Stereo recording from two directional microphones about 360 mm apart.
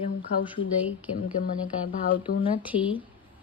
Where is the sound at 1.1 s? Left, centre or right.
Left.